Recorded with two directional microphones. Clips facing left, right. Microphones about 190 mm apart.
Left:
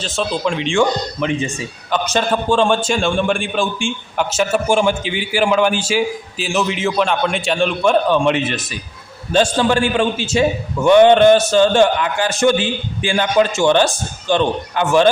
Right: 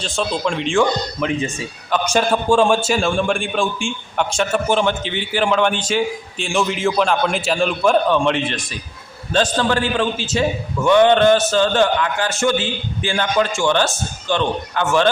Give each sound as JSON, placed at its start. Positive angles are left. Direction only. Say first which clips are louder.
{"t": 0.0, "sound": "a man's voice", "louder": "left 1 dB", "side_deg": 0}